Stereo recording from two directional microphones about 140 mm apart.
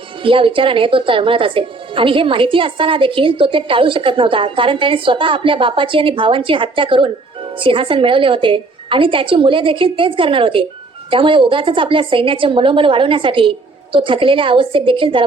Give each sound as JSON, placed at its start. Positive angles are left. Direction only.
{"t": 0.2, "sound": "a woman's voice", "side_deg": -40}